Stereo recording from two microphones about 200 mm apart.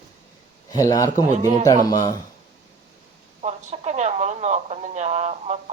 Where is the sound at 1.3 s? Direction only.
40° right (ahead or behind).